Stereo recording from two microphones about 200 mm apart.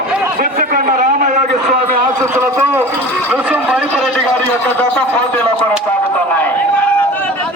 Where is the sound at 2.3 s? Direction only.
10° right (ahead or behind).